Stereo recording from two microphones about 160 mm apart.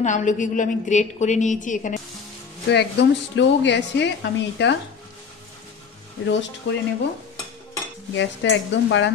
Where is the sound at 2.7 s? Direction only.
90° left.